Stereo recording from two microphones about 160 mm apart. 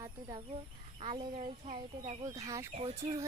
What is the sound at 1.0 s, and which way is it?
Speech, 35° right (ahead or behind).